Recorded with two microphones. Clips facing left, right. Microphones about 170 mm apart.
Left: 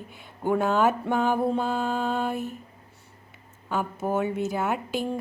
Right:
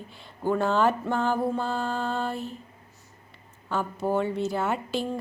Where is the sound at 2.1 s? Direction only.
15° left (ahead or behind).